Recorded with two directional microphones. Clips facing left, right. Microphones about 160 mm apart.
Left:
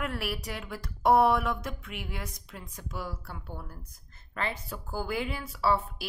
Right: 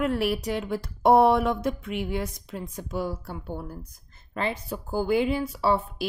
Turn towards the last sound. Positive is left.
turn(degrees=-20)  # may be behind; listen again after turning